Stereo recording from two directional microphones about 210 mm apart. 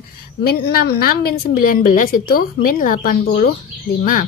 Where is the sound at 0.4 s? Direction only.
45° left (ahead or behind).